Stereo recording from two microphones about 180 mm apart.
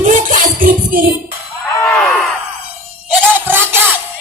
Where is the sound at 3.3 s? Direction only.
10° right (ahead or behind).